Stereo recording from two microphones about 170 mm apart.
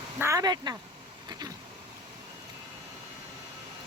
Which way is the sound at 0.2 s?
20° right (ahead or behind).